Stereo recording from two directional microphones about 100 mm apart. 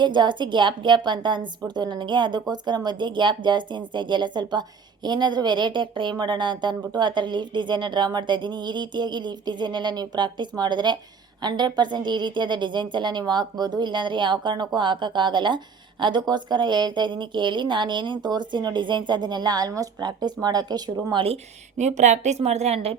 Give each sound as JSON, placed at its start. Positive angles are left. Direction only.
{"t": 0.0, "sound": "a woman's voice", "side_deg": -50}
{"t": 21.1, "sound": "speech", "side_deg": -60}
{"t": 22.4, "sound": "a woman's voice", "side_deg": -90}